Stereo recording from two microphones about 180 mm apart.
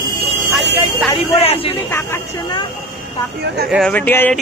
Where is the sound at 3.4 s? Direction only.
65° right (ahead or behind).